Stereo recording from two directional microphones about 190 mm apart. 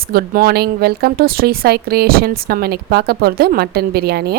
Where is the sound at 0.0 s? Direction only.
50° right (ahead or behind).